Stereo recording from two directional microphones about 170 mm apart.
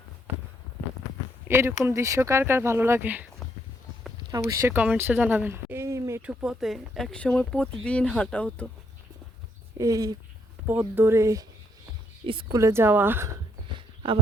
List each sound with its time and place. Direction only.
1.5 s speech: 15° right (ahead or behind)
4.3 s speech: 20° right (ahead or behind)
6.4 s speech: centre (ahead or behind)
9.7 s speech: 20° right (ahead or behind)
12.2 s speech: 30° right (ahead or behind)
12.5 s speech: 15° right (ahead or behind)
13.7 s a sound: 30° right (ahead or behind)